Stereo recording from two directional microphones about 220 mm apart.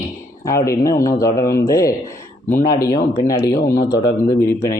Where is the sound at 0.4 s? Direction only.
15° left (ahead or behind).